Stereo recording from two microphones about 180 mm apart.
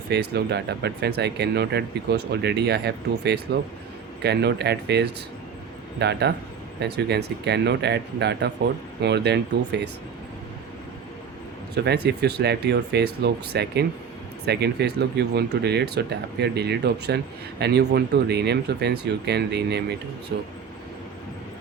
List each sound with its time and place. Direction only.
0.1 s speech: 65° right (ahead or behind)
11.7 s speech: 65° right (ahead or behind)